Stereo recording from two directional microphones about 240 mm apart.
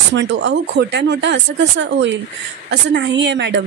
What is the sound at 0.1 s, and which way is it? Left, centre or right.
A woman's voice, right.